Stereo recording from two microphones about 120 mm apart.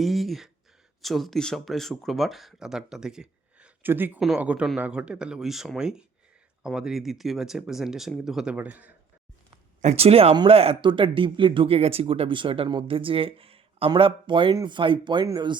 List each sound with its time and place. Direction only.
0.0 s speech: centre (ahead or behind)
3.8 s speech: 15° right (ahead or behind)
9.8 s speech: 60° right (ahead or behind); by 15.5 s 35° right (ahead or behind)